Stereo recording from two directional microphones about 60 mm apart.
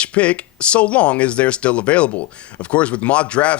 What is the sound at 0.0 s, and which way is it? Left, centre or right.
Speech, left.